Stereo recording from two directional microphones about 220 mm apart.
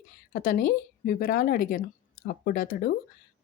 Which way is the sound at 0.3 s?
40° left (ahead or behind).